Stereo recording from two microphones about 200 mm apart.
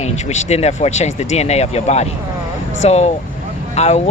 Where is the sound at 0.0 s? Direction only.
35° left (ahead or behind).